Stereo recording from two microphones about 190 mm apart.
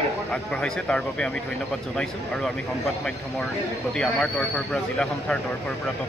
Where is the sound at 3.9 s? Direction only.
5° left (ahead or behind).